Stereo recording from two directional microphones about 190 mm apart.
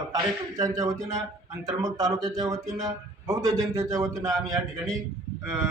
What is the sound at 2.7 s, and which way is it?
Speech, centre (ahead or behind).